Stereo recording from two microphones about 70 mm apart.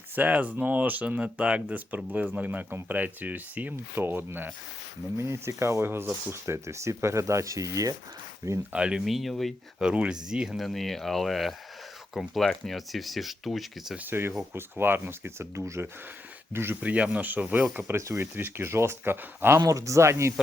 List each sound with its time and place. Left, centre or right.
0.2 s speech: right
5.1 s speech: right
8.7 s speech: centre
9.0 s speech: centre
9.8 s speech: centre
10.6 s speech: centre
14.0 s speech: right
16.8 s speech: right
17.9 s speech: right
18.2 s speech: right
19.5 s speech: right